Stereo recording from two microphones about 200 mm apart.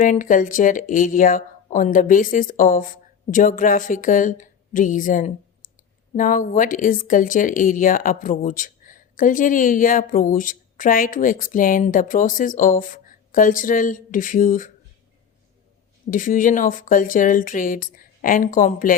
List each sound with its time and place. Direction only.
0.0 s speech: 40° left (ahead or behind)
16.0 s speech: 40° left (ahead or behind)